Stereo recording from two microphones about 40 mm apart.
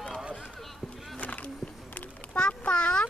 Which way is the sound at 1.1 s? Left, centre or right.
Left.